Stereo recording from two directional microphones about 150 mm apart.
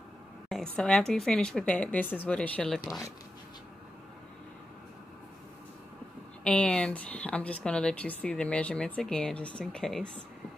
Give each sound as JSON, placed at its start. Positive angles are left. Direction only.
{"t": 0.5, "sound": "speech", "side_deg": 5}
{"t": 2.8, "sound": "speech", "side_deg": 25}
{"t": 6.4, "sound": "speech", "side_deg": 5}